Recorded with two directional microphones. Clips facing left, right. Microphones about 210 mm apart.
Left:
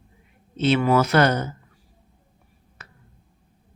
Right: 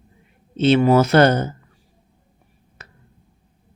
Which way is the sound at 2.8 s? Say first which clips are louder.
Right 2 dB; 25° right (ahead or behind).